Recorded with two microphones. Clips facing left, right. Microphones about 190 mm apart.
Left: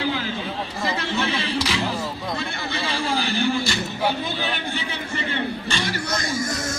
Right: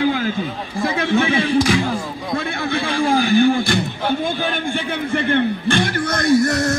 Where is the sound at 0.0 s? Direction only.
50° right (ahead or behind).